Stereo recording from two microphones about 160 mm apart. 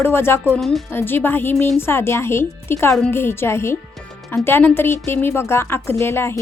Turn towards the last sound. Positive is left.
turn(degrees=15)  # may be behind; listen again after turning